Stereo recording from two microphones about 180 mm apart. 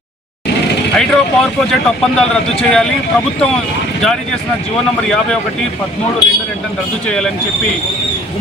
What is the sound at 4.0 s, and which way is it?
A man's voice, 5° left (ahead or behind).